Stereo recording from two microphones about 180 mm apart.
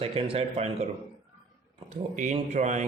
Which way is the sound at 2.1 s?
40° right (ahead or behind).